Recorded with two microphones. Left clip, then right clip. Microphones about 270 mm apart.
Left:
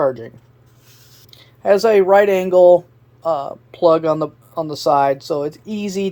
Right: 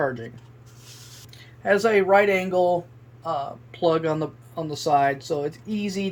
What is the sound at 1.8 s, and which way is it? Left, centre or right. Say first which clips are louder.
Speech: left 7 dB; left.